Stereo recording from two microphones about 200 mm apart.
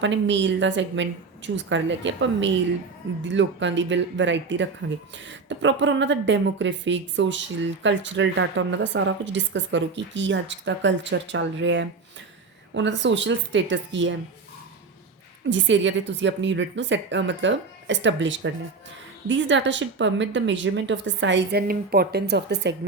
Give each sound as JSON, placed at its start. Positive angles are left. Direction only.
{"t": 0.0, "sound": "speech", "side_deg": -65}
{"t": 15.4, "sound": "speech", "side_deg": -65}